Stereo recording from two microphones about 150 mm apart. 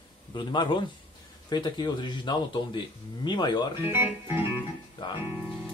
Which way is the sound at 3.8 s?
15° right (ahead or behind).